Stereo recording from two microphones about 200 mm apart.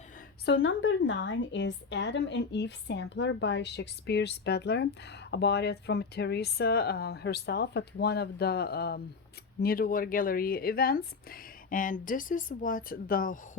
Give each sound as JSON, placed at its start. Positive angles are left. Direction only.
{"t": 0.4, "sound": "a woman's voice", "side_deg": 65}